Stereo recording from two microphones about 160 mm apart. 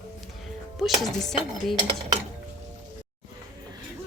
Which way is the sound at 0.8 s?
Centre (ahead or behind).